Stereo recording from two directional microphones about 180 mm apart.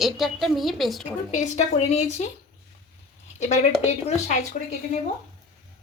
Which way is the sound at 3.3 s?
40° left (ahead or behind).